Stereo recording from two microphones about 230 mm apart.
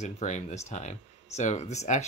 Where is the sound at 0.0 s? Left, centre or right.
Left.